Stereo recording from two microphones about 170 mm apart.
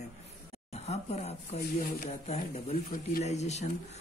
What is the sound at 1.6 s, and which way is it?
Speech, 55° left (ahead or behind).